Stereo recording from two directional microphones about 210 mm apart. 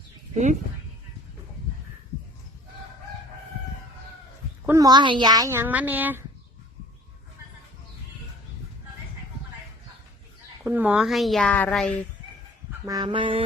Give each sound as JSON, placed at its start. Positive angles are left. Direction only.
{"t": 4.6, "sound": "speech", "side_deg": -15}
{"t": 10.6, "sound": "a woman's voice", "side_deg": -10}
{"t": 12.8, "sound": "a sound", "side_deg": -20}